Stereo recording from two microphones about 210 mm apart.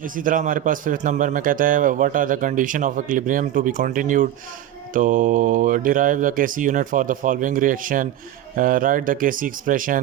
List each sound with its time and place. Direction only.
0.0 s a man's voice: 40° right (ahead or behind)